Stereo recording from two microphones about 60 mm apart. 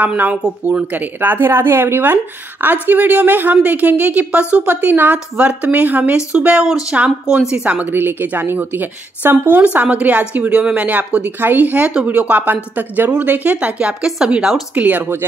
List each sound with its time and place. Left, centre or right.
0.0 s a woman's voice: right
4.6 s a woman's voice: right
6.1 s a woman's voice: centre
7.2 s speech: centre
7.9 s a woman's voice: right; by 14.6 s centre
14.8 s a woman's voice: right